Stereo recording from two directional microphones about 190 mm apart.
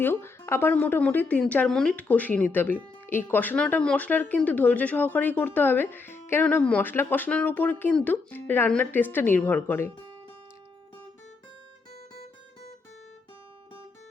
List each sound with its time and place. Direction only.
0.0 s speech: 10° left (ahead or behind)